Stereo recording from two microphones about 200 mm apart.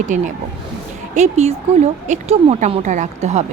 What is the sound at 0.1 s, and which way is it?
A woman's voice, 40° right (ahead or behind).